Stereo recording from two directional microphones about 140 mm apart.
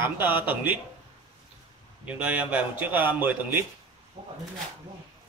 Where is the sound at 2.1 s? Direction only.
10° right (ahead or behind).